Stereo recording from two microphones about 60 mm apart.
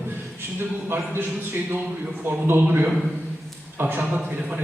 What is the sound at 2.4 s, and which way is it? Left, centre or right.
A man's voice, right.